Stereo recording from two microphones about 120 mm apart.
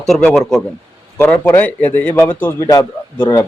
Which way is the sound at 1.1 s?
10° left (ahead or behind).